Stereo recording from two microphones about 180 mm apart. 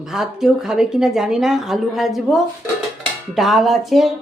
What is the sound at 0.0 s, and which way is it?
Speech, 5° right (ahead or behind).